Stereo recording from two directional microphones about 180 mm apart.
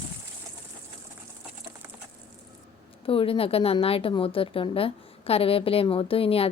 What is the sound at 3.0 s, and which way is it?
A woman's voice, 30° left (ahead or behind).